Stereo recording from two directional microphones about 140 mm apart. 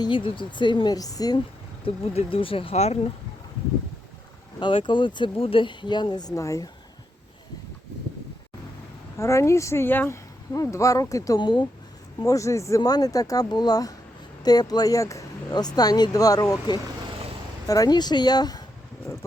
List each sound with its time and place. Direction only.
0.0 s speech: 35° left (ahead or behind)
1.8 s speech: 40° left (ahead or behind)
4.6 s speech: 35° left (ahead or behind)
9.1 s speech: 20° left (ahead or behind)
12.2 s speech: 20° left (ahead or behind)